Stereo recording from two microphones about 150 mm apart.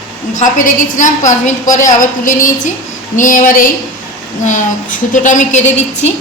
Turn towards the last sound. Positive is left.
turn(degrees=50)  # may be behind; listen again after turning